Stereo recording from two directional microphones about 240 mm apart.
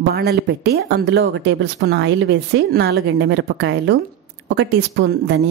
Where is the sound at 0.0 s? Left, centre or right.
Right.